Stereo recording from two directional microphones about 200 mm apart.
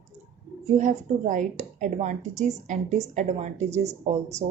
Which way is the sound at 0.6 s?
35° right (ahead or behind).